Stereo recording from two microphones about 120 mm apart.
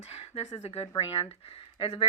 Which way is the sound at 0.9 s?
45° left (ahead or behind).